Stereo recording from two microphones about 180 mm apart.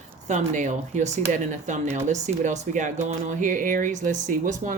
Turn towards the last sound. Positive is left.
turn(degrees=-45)  # may be behind; listen again after turning